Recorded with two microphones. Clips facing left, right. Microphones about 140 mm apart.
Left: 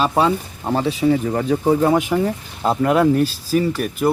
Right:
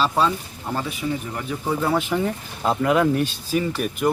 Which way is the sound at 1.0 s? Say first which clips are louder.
Left 11 dB; 65° left (ahead or behind).